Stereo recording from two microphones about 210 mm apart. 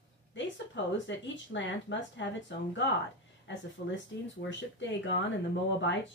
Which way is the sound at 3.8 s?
45° left (ahead or behind).